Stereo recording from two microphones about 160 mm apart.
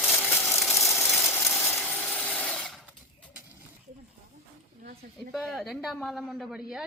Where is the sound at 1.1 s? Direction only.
Centre (ahead or behind).